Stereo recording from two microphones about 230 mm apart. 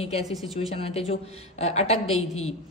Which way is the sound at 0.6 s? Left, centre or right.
Left.